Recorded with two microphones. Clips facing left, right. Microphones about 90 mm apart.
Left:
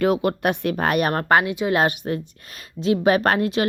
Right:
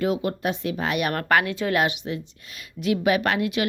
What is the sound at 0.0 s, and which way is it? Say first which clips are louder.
Speech: left 5 dB; 65° left (ahead or behind).